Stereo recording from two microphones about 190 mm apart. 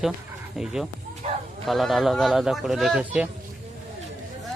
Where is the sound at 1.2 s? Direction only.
35° right (ahead or behind).